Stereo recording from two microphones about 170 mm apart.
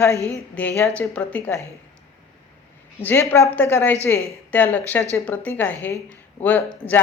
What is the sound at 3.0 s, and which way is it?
Speech, 15° left (ahead or behind).